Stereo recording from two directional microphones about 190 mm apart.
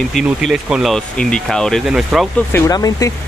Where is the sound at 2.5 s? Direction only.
15° left (ahead or behind).